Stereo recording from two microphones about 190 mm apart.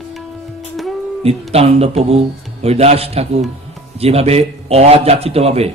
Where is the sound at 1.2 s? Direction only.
30° right (ahead or behind).